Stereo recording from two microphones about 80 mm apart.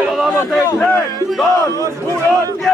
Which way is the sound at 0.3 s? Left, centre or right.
Left.